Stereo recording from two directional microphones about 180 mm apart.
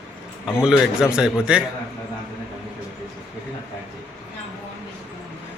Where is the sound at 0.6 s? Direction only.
5° right (ahead or behind).